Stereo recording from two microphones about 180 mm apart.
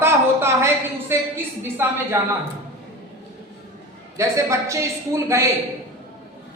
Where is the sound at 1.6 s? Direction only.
10° right (ahead or behind).